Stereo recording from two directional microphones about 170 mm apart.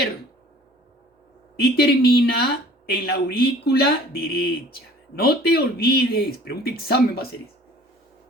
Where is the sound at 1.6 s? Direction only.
65° left (ahead or behind).